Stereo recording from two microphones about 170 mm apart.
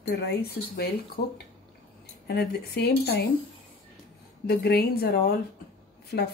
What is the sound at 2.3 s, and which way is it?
Speech, 70° left (ahead or behind).